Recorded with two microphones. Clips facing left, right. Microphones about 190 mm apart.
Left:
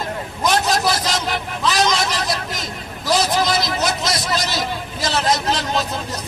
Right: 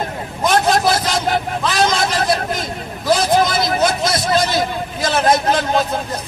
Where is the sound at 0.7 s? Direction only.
55° right (ahead or behind).